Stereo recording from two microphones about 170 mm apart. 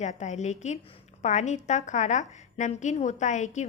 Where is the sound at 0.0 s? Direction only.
45° left (ahead or behind).